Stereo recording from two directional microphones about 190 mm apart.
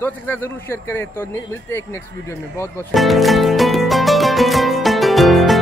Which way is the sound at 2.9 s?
Centre (ahead or behind).